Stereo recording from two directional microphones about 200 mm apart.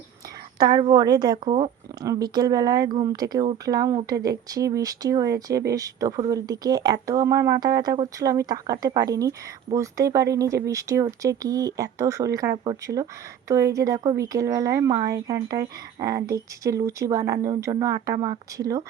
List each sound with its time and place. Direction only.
0.6 s speech: 20° right (ahead or behind)